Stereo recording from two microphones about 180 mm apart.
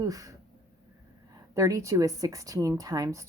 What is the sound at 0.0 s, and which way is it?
Speech, 20° right (ahead or behind).